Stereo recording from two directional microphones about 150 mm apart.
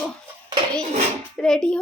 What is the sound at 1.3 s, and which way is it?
Speech, 5° left (ahead or behind).